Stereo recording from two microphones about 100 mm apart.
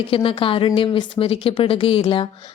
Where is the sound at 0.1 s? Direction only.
65° left (ahead or behind).